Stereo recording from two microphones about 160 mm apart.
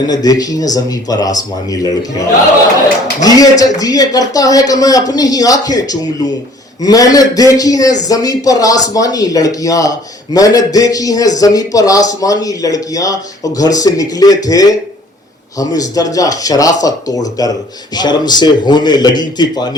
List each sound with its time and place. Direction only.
0.1 s a man's voice: 25° left (ahead or behind)
3.2 s a man's voice: 20° left (ahead or behind)